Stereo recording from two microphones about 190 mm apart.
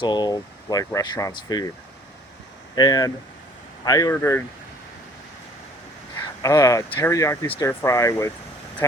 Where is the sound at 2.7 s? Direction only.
20° left (ahead or behind).